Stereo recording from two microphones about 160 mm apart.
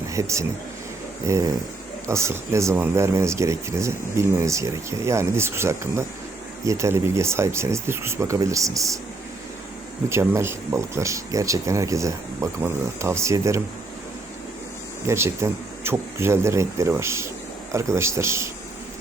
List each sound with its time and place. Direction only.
0.1 s speech: 20° right (ahead or behind)
10.1 s speech: 15° right (ahead or behind)
15.0 s speech: 15° right (ahead or behind)